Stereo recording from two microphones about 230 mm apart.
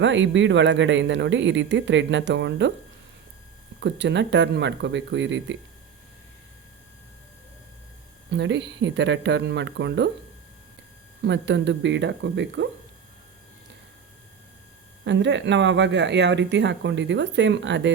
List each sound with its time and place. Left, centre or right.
0.0 s speech: right
3.8 s speech: right
8.3 s speech: right
11.2 s speech: right
15.0 s speech: right